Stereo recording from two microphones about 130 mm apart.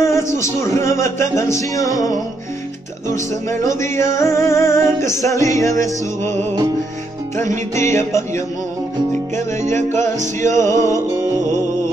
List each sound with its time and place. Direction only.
0.1 s music: 20° left (ahead or behind)
7.3 s music: 20° left (ahead or behind)
9.6 s music: 65° right (ahead or behind)
10.5 s music: 25° left (ahead or behind)